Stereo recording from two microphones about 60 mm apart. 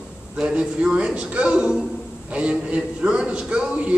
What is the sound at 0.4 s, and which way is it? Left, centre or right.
A man's voice, centre.